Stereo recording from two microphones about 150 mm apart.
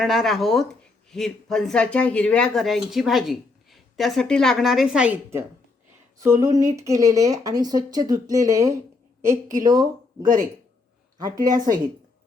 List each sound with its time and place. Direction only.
0.0 s speech: centre (ahead or behind); by 9.8 s 25° right (ahead or behind)
11.2 s speech: 25° right (ahead or behind)